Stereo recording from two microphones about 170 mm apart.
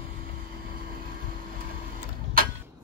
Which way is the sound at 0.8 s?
60° right (ahead or behind).